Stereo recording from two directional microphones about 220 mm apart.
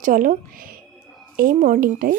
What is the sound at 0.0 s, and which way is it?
Speech, 35° right (ahead or behind).